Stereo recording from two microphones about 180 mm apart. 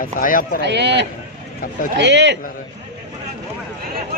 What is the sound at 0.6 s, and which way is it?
Speech, 70° right (ahead or behind).